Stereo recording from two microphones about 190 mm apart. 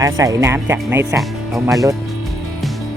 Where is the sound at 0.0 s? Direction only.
15° right (ahead or behind); by 1.6 s centre (ahead or behind).